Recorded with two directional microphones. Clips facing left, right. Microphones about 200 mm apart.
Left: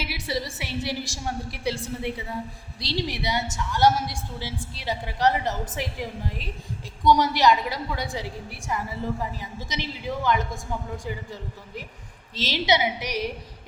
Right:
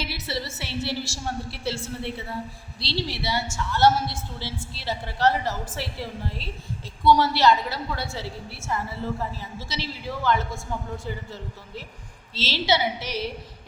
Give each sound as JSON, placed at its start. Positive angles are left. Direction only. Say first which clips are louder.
{"t": 0.0, "sound": "a woman's voice", "louder": "left 1 dB", "side_deg": 15}